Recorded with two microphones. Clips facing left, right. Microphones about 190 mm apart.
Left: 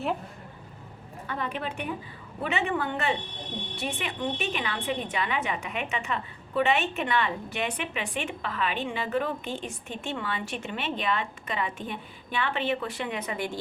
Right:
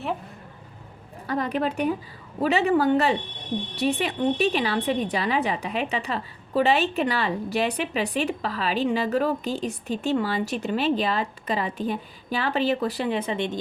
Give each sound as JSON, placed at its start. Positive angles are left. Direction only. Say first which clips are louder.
{"t": 1.3, "sound": "a woman's voice", "louder": "right 8 dB", "side_deg": -40}